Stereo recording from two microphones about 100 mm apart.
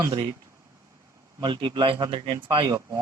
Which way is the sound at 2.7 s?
40° right (ahead or behind).